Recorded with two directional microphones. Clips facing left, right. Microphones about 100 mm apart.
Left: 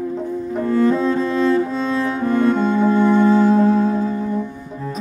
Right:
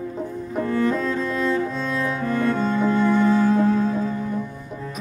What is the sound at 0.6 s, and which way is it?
Music, 30° left (ahead or behind).